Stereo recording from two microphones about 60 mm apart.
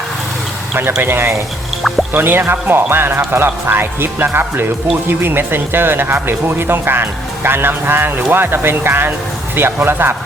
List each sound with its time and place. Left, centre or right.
0.7 s speech: right